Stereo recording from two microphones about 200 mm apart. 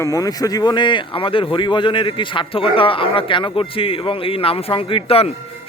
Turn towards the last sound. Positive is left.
turn(degrees=30)  # may be behind; listen again after turning